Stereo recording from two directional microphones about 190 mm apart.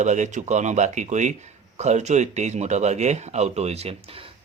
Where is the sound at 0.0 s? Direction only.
40° right (ahead or behind).